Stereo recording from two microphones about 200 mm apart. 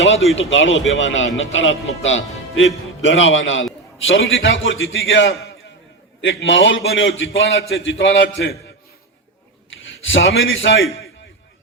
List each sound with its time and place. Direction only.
0.3 s a man's voice: 70° left (ahead or behind)
9.6 s a man's voice: 70° left (ahead or behind)